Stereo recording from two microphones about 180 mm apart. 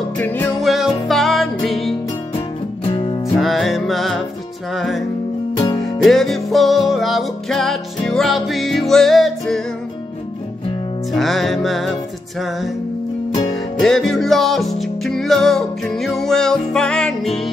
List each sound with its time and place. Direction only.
0.2 s music: 10° left (ahead or behind)
0.6 s music: centre (ahead or behind)
2.9 s music: 30° left (ahead or behind)
3.3 s music: centre (ahead or behind)
6.0 s music: centre (ahead or behind)
11.1 s music: centre (ahead or behind)
13.7 s music: centre (ahead or behind)